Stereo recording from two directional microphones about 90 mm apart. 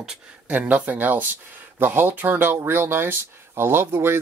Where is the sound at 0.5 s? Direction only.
15° right (ahead or behind).